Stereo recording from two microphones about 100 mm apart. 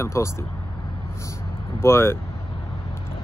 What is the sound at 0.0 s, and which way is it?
Speech, 25° left (ahead or behind).